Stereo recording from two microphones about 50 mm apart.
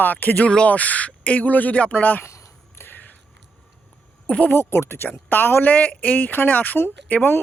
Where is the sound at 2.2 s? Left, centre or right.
Left.